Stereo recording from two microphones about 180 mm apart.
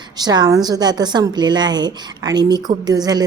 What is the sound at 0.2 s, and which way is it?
A woman's voice, 20° right (ahead or behind).